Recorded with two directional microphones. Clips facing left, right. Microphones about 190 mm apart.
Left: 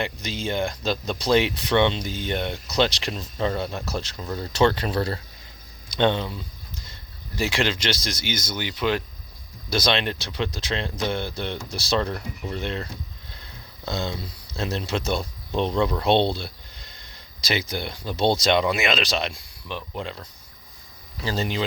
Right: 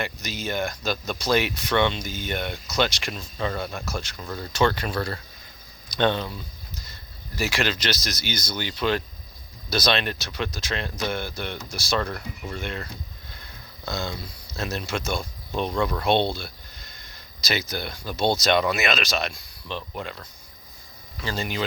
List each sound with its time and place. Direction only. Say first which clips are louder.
0.0 s speech: left 2 dB; 30° left (ahead or behind)
7.3 s speech: left 2 dB; 20° left (ahead or behind)
19.6 s speech: left 1 dB; 15° left (ahead or behind)
21.2 s speech: left 3 dB; 35° left (ahead or behind)